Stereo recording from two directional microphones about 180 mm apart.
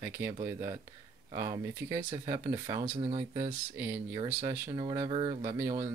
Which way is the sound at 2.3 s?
25° right (ahead or behind).